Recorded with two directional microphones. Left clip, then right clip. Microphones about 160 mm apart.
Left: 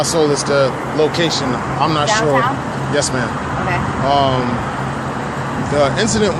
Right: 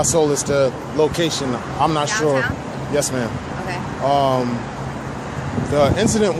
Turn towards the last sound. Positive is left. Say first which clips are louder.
# left 2 dB
turn(degrees=-50)  # may be behind; listen again after turning